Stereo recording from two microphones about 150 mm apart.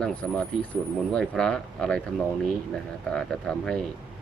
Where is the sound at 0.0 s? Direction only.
5° left (ahead or behind).